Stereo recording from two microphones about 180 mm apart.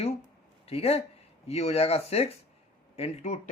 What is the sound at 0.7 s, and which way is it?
Speech, 35° left (ahead or behind).